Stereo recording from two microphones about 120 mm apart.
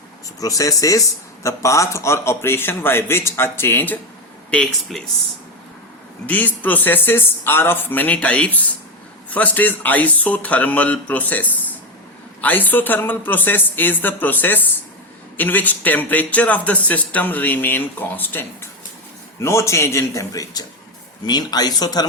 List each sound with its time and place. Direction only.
0.3 s speech: 30° left (ahead or behind)
4.5 s speech: 5° left (ahead or behind)
6.2 s a man's voice: 15° left (ahead or behind); by 22.0 s 35° left (ahead or behind)